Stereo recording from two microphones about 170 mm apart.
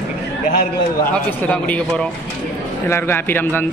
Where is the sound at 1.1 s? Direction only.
10° left (ahead or behind).